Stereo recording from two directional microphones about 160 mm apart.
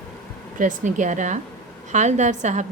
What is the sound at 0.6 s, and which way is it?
A woman's voice, 50° right (ahead or behind).